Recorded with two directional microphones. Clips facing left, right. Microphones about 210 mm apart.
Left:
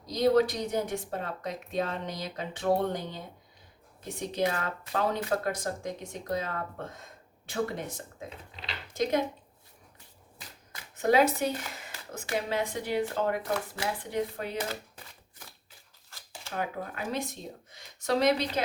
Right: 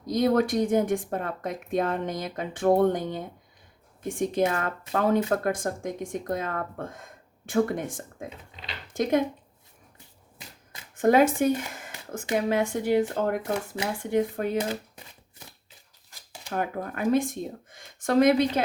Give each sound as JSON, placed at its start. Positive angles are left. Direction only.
{"t": 0.0, "sound": "speech", "side_deg": -50}
{"t": 10.9, "sound": "speech", "side_deg": -50}
{"t": 14.7, "sound": "a sound", "side_deg": -20}
{"t": 16.0, "sound": "shuffling cards", "side_deg": -15}
{"t": 16.5, "sound": "speech", "side_deg": -50}